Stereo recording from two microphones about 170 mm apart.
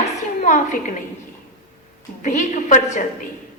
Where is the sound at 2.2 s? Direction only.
45° left (ahead or behind).